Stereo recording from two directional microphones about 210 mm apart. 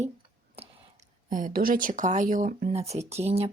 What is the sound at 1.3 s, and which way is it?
A woman's voice, 40° right (ahead or behind).